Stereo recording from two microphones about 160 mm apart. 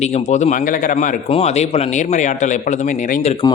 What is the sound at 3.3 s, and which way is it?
Speech, 35° left (ahead or behind).